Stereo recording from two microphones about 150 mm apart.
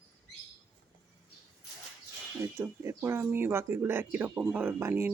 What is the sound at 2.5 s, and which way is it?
Speech, 15° right (ahead or behind).